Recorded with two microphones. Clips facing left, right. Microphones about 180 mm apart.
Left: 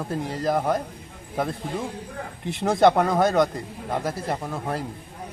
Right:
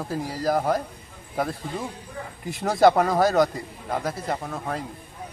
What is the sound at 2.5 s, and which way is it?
A man's voice, centre (ahead or behind).